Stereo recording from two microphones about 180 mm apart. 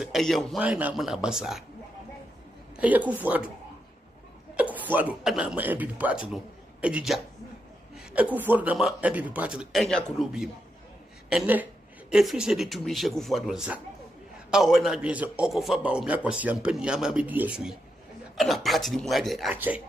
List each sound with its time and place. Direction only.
0.0 s a man's voice: centre (ahead or behind)
2.8 s speech: 10° right (ahead or behind)
4.6 s a man's voice: 10° right (ahead or behind)